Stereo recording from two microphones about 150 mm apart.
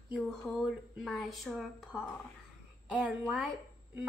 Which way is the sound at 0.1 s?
Centre (ahead or behind).